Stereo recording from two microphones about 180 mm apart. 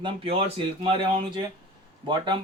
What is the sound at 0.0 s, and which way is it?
Speech, 30° right (ahead or behind).